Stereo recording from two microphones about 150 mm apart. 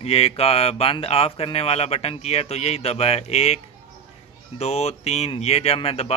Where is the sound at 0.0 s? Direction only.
40° left (ahead or behind).